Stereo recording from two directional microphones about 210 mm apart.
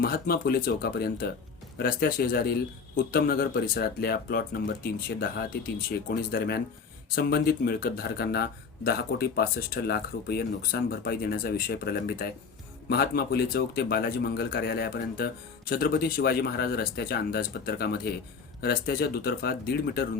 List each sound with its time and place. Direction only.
0.0 s speech: 45° left (ahead or behind)